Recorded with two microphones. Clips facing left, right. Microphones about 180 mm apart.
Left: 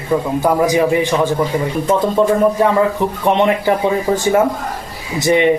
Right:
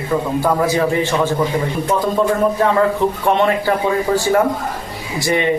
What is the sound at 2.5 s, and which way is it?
Speech, 15° left (ahead or behind).